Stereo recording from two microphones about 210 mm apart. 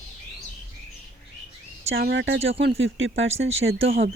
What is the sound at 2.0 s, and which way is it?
Speech, 50° right (ahead or behind).